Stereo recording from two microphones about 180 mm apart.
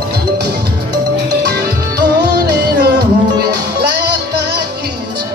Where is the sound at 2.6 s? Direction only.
65° right (ahead or behind).